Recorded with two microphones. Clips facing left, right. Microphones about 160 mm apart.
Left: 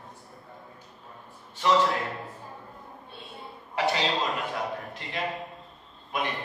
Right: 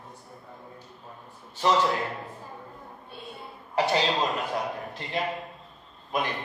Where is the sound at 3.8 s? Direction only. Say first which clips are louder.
Right 2 dB; centre (ahead or behind).